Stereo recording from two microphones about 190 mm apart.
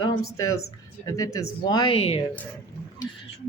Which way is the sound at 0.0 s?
20° left (ahead or behind).